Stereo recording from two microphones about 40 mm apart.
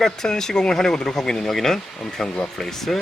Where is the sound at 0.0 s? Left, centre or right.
Centre.